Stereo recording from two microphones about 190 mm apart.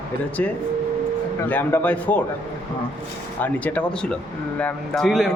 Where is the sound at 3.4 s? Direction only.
10° left (ahead or behind).